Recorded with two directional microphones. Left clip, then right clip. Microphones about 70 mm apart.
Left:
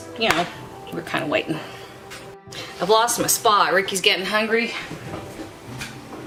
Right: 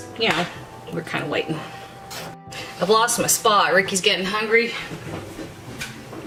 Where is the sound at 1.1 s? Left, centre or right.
Left.